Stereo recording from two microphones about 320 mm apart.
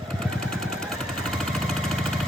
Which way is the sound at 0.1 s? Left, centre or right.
Centre.